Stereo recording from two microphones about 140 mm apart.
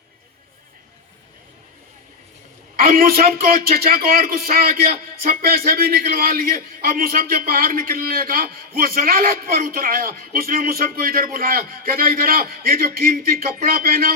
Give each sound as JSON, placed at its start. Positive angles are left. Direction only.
{"t": 2.7, "sound": "a man's voice", "side_deg": -90}